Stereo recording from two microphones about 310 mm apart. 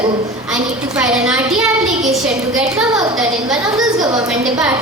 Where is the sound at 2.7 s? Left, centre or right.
Centre.